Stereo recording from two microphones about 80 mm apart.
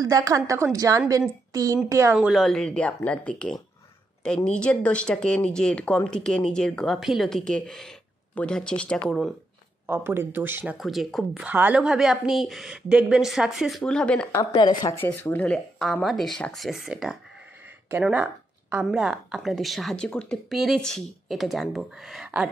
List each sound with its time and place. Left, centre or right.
0.0 s a woman's voice: right
2.4 s a woman's voice: centre
9.8 s speech: right
10.8 s a woman's voice: centre
11.4 s speech: centre
11.8 s a woman's voice: centre
13.9 s speech: centre
14.5 s speech: left
15.0 s speech: left
15.8 s a woman's voice: centre
16.8 s speech: centre
18.9 s a woman's voice: centre
20.4 s a woman's voice: centre